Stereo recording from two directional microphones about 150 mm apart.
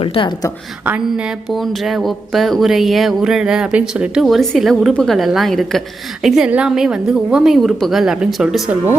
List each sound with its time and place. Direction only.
0.0 s a woman's voice: 35° left (ahead or behind)
0.9 s speech: 5° right (ahead or behind)